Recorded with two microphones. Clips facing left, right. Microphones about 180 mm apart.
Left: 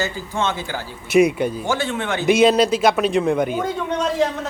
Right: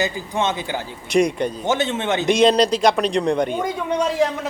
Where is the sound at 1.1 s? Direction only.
5° left (ahead or behind).